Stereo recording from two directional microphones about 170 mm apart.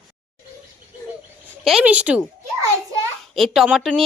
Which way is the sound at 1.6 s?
5° right (ahead or behind).